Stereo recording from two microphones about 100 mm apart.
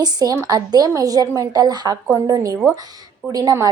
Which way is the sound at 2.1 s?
35° right (ahead or behind).